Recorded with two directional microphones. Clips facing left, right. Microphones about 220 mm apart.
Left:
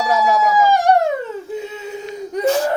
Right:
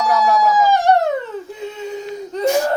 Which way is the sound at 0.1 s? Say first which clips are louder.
Even; 15° left (ahead or behind).